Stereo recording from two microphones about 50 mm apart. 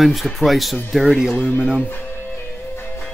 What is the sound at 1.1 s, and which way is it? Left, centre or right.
Speech, centre.